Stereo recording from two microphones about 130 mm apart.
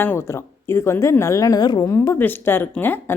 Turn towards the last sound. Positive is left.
turn(degrees=15)  # may be behind; listen again after turning